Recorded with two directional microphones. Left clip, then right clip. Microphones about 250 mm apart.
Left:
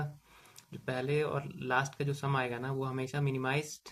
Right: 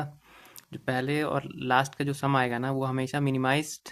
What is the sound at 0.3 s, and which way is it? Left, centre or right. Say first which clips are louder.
Speech: right 7 dB; right.